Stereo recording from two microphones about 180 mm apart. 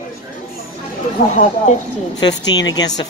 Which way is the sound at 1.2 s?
70° left (ahead or behind).